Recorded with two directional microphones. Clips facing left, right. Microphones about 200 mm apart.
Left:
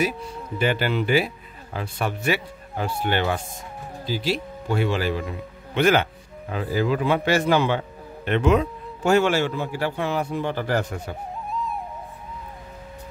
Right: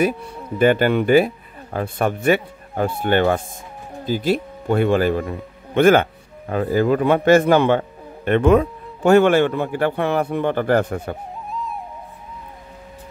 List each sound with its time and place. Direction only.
0.0 s a man's voice: 55° right (ahead or behind)
11.4 s music: centre (ahead or behind)